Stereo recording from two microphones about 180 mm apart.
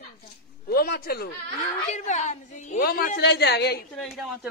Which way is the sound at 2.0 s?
40° left (ahead or behind).